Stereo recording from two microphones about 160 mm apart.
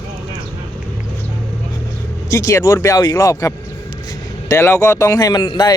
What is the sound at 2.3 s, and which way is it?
Speech, 20° left (ahead or behind).